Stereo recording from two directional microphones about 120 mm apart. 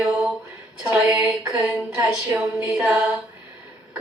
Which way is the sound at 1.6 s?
20° right (ahead or behind).